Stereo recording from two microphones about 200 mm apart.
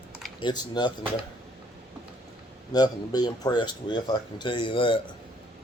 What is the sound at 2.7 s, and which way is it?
Speech, 20° left (ahead or behind).